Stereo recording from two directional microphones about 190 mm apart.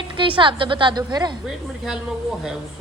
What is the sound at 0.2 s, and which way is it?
A woman's voice, 25° right (ahead or behind).